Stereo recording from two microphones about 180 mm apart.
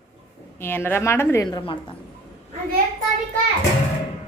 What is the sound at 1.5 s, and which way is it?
Speech, 25° left (ahead or behind).